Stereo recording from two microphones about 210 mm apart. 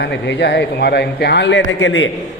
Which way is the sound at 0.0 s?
55° left (ahead or behind).